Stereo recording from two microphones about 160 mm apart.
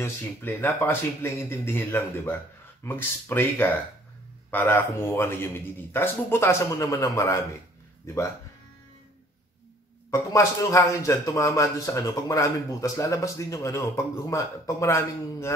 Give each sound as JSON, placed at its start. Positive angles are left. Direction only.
{"t": 0.0, "sound": "speech", "side_deg": 15}
{"t": 10.1, "sound": "a man's voice", "side_deg": 20}